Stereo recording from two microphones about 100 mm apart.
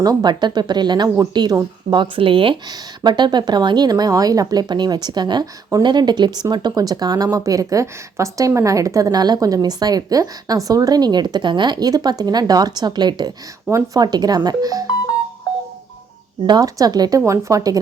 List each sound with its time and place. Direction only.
0.0 s speech: 40° right (ahead or behind)
1.9 s speech: 60° right (ahead or behind)
2.6 s speech: 45° right (ahead or behind)
13.7 s speech: 35° right (ahead or behind)
16.5 s speech: 35° right (ahead or behind)